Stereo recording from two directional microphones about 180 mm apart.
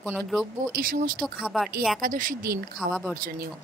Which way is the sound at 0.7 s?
50° right (ahead or behind).